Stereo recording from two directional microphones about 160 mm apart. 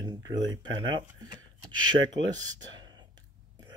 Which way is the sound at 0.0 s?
25° right (ahead or behind).